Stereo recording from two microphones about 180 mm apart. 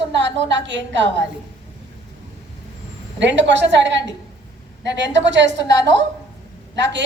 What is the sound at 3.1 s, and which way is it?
A woman's voice, 85° right.